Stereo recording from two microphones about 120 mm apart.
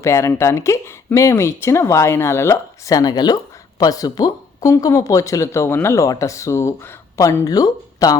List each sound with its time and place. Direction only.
0.0 s speech: 25° left (ahead or behind)